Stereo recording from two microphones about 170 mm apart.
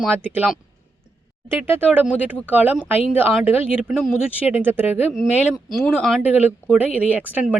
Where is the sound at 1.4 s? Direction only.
15° right (ahead or behind).